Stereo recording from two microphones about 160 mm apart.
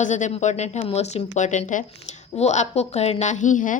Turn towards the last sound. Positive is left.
turn(degrees=55)  # may be behind; listen again after turning